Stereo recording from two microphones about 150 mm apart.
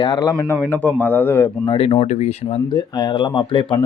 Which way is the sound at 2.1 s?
50° left (ahead or behind).